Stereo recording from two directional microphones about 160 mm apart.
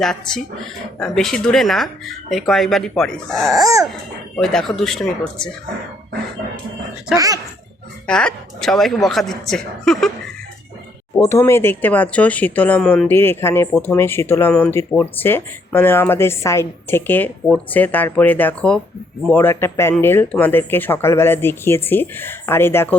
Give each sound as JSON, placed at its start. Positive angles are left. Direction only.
{"t": 0.0, "sound": "speech", "side_deg": 5}
{"t": 3.6, "sound": "a sound", "side_deg": -20}
{"t": 4.4, "sound": "speech", "side_deg": 5}
{"t": 8.0, "sound": "speech", "side_deg": 5}
{"t": 11.2, "sound": "speech", "side_deg": 15}